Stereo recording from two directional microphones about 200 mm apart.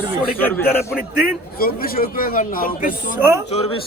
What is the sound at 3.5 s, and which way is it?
Speech, 30° left (ahead or behind).